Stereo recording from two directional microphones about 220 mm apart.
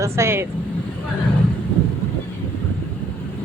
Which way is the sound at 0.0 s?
10° right (ahead or behind).